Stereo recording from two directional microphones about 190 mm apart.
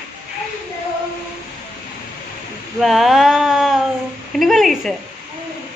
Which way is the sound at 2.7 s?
Centre (ahead or behind).